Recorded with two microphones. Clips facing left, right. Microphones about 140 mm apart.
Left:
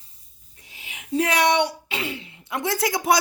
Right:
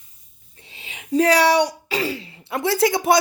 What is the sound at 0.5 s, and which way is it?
Speech, 30° right (ahead or behind).